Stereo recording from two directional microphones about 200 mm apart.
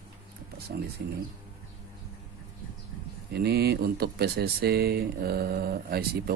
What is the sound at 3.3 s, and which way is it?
Speech, 55° right (ahead or behind).